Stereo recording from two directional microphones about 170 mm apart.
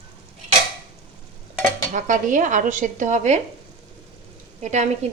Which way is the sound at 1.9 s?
50° right (ahead or behind).